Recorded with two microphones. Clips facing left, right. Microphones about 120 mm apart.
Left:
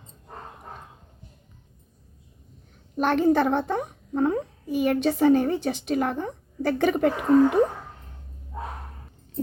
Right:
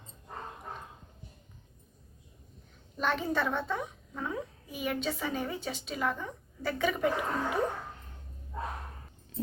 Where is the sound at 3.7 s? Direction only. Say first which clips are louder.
Left 9 dB; 50° left (ahead or behind).